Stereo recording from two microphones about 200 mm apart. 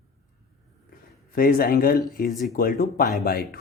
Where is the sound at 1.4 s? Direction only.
45° left (ahead or behind).